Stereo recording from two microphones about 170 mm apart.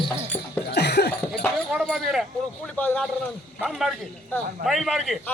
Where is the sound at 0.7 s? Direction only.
75° left (ahead or behind).